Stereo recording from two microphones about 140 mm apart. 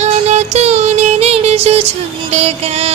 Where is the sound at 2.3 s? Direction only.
50° right (ahead or behind).